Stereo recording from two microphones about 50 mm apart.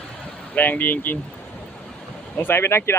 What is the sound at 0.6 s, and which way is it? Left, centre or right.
Speech, left.